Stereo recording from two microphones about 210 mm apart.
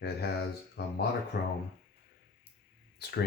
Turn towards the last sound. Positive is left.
turn(degrees=50)  # may be behind; listen again after turning